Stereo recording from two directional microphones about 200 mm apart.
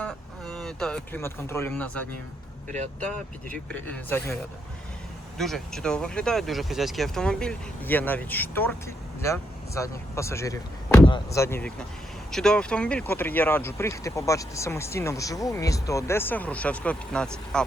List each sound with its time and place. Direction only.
0.0 s speech: 5° left (ahead or behind)
2.6 s speech: 35° right (ahead or behind)
3.0 s speech: 5° left (ahead or behind)
5.4 s speech: centre (ahead or behind)